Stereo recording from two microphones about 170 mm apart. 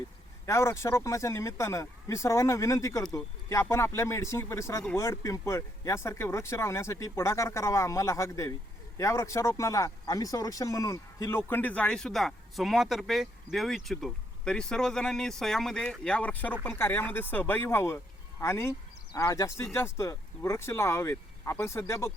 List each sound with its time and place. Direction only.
0.4 s speech: 15° left (ahead or behind)